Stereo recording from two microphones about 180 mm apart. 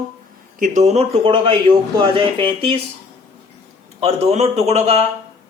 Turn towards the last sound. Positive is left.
turn(degrees=-35)  # may be behind; listen again after turning